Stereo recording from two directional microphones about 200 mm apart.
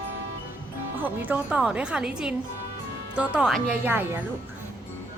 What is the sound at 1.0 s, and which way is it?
A woman's voice, 10° right (ahead or behind).